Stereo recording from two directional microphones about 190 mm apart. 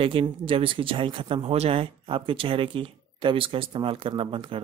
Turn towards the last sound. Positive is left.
turn(degrees=-25)  # may be behind; listen again after turning